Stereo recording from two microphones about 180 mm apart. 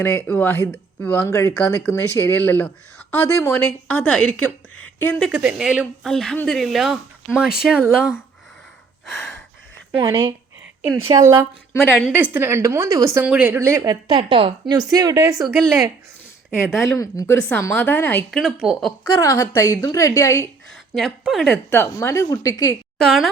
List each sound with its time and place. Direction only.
0.0 s speech: 10° left (ahead or behind)
5.2 s speech: 10° right (ahead or behind)
10.0 s a woman's voice: 20° right (ahead or behind)
13.1 s a woman's voice: 10° right (ahead or behind)
16.6 s speech: centre (ahead or behind)
16.9 s speech: 15° left (ahead or behind)
18.3 s speech: centre (ahead or behind)
19.2 s speech: 15° left (ahead or behind)
20.9 s speech: centre (ahead or behind)
21.7 s a woman's voice: 15° left (ahead or behind)
23.0 s speech: centre (ahead or behind)